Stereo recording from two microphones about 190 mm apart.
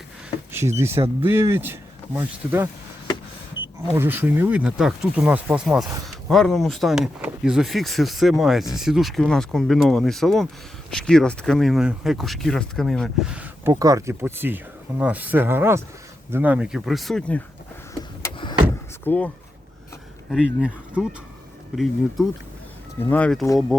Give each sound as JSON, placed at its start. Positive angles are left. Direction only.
{"t": 0.5, "sound": "speech", "side_deg": -15}
{"t": 3.9, "sound": "speech", "side_deg": -10}
{"t": 13.7, "sound": "speech", "side_deg": -15}
{"t": 18.2, "sound": "power windows", "side_deg": 25}
{"t": 19.0, "sound": "speech", "side_deg": 10}
{"t": 20.3, "sound": "speech", "side_deg": -5}
{"t": 23.0, "sound": "speech", "side_deg": 5}